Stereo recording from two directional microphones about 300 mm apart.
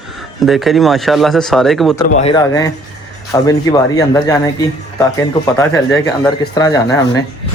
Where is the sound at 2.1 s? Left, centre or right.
Centre.